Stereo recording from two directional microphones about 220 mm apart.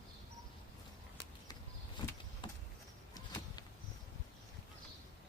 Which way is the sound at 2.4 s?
20° left (ahead or behind).